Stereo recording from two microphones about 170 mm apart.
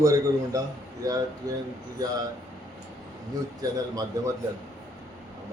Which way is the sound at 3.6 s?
20° right (ahead or behind).